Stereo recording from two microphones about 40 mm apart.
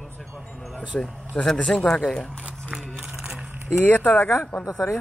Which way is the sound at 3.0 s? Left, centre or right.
Right.